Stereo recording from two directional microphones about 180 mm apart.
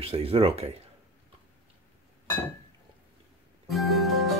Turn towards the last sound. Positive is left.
turn(degrees=0)  # may be behind; listen again after turning